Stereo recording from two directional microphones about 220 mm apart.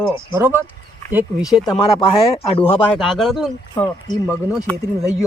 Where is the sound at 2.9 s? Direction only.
Centre (ahead or behind).